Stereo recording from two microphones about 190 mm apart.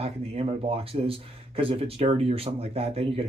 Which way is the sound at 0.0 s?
30° right (ahead or behind).